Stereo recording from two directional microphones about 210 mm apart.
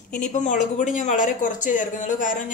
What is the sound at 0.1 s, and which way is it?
Speech, 35° left (ahead or behind).